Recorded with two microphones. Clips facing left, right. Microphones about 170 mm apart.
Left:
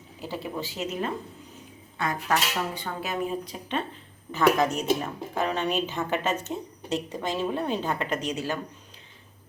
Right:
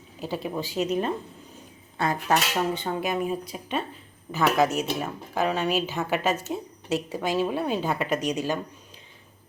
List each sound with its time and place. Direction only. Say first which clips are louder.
0.2 s a woman's voice: right 3 dB; 15° right (ahead or behind)
2.0 s speech: right 3 dB; 30° right (ahead or behind)
3.0 s a woman's voice: right 3 dB; 10° right (ahead or behind)